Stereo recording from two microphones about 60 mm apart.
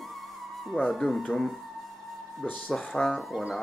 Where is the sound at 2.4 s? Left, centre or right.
Left.